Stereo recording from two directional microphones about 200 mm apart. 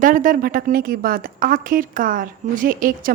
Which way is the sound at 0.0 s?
40° right (ahead or behind).